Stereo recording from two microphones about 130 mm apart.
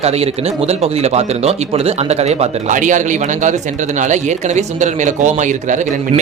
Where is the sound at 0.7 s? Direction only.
55° right (ahead or behind).